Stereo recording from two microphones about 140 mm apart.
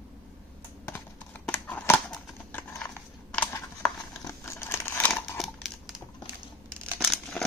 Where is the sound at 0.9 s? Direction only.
15° left (ahead or behind).